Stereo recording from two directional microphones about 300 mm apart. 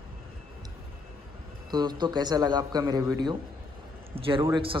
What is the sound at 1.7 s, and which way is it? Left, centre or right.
A man's voice, centre.